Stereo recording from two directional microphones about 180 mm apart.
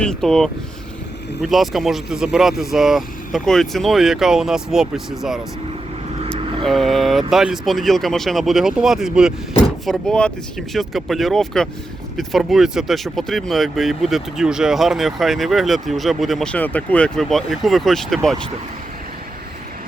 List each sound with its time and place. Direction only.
0.0 s speech: 5° left (ahead or behind)
6.4 s vehicle: 30° right (ahead or behind)
6.7 s speech: centre (ahead or behind)